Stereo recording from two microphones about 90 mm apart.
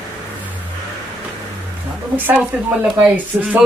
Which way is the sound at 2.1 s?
20° right (ahead or behind).